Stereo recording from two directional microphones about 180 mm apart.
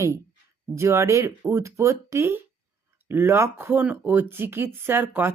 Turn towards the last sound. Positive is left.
turn(degrees=-10)  # may be behind; listen again after turning